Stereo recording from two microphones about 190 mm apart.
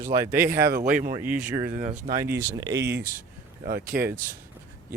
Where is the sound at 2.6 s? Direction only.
20° right (ahead or behind).